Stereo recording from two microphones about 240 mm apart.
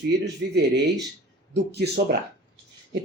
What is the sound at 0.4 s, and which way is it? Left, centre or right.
Speech, right.